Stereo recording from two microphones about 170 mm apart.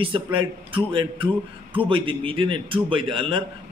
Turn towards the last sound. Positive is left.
turn(degrees=-30)  # may be behind; listen again after turning